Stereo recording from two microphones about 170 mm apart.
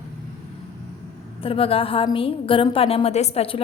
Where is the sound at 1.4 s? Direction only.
35° left (ahead or behind).